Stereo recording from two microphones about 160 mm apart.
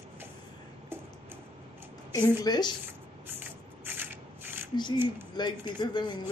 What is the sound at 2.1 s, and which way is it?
Speech, 25° left (ahead or behind).